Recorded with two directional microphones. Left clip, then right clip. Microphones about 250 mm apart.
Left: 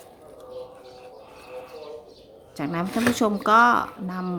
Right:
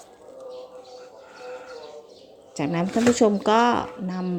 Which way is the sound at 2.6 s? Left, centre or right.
Centre.